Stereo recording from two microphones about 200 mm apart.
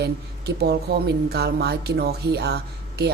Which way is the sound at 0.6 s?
55° right (ahead or behind).